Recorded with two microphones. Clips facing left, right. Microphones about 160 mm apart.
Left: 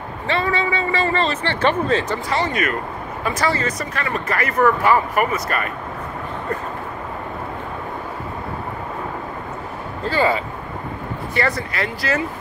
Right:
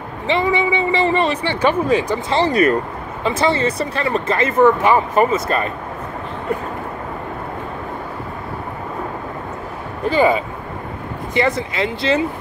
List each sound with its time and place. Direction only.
0.3 s a man's voice: 15° right (ahead or behind)
2.2 s speech: 30° right (ahead or behind)
10.0 s a man's voice: 15° right (ahead or behind)